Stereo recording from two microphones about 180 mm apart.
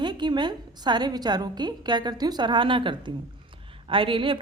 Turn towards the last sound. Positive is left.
turn(degrees=-30)  # may be behind; listen again after turning